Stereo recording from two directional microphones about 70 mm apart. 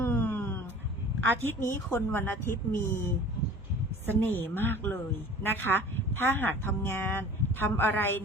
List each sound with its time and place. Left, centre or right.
0.0 s a sound: left
1.4 s a woman's voice: left
4.2 s a woman's voice: left